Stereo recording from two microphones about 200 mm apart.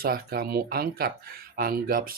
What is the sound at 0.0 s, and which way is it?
Speech, 50° right (ahead or behind).